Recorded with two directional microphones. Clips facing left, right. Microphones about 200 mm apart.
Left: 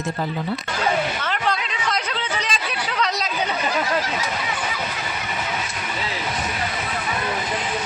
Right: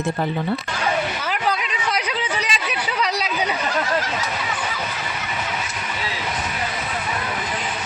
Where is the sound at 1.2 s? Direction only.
10° right (ahead or behind).